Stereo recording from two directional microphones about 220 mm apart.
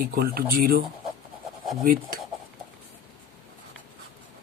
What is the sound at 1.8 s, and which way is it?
Speech, 40° right (ahead or behind).